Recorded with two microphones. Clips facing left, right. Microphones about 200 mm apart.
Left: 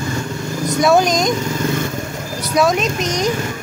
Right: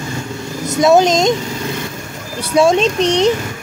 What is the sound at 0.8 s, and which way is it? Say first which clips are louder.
Speech: right 4 dB; 20° right (ahead or behind).